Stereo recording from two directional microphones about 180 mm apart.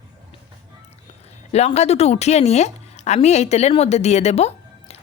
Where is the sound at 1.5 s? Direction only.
35° left (ahead or behind).